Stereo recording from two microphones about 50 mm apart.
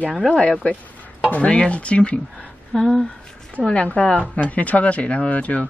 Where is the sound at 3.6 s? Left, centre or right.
Centre.